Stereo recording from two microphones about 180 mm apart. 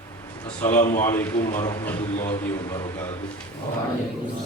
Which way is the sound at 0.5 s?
15° left (ahead or behind).